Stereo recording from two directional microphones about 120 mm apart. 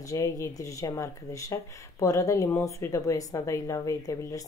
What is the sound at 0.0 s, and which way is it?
Speech, 25° left (ahead or behind).